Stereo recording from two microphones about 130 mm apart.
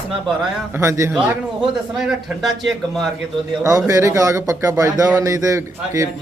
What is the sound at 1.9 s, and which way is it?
A man's voice, 5° right (ahead or behind).